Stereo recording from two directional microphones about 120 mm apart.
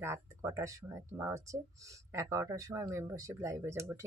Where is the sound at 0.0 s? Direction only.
25° right (ahead or behind).